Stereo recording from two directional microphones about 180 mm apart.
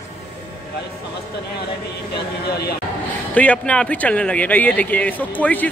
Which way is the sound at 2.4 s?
65° left (ahead or behind).